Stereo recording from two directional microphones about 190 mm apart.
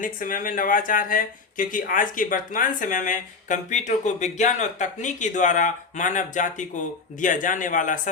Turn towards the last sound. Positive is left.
turn(degrees=40)  # may be behind; listen again after turning